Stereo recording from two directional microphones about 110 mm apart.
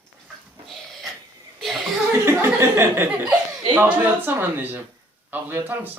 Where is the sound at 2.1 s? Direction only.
25° right (ahead or behind).